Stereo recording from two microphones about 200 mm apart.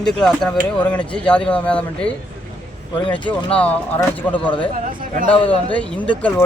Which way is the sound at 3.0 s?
25° left (ahead or behind).